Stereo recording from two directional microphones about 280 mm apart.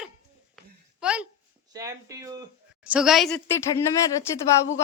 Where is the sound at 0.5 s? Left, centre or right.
Centre.